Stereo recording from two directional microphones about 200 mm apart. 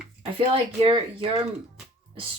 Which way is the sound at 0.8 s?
25° right (ahead or behind).